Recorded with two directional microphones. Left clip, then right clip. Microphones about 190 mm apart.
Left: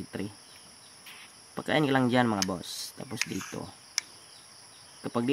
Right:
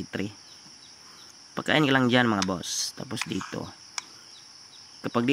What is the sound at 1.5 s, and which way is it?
Speech, 15° right (ahead or behind).